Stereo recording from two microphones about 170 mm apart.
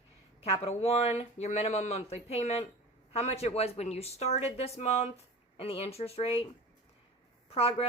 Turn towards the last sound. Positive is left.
turn(degrees=35)  # may be behind; listen again after turning